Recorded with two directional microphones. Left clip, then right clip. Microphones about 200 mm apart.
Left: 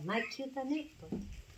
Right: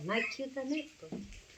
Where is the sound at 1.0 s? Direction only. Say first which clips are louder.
Left 1 dB; 25° left (ahead or behind).